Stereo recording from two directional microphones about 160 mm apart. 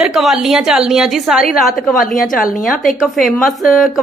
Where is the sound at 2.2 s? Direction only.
60° left (ahead or behind).